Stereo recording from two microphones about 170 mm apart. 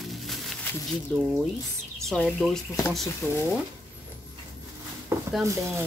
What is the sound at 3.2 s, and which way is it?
Speech, 15° left (ahead or behind).